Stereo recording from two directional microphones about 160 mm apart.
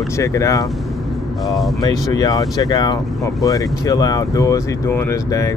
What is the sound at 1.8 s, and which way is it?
Speech, 20° left (ahead or behind).